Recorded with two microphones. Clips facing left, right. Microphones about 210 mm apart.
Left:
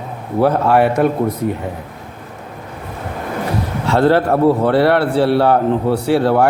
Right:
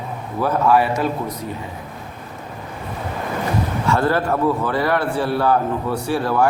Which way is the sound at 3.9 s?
70° left (ahead or behind).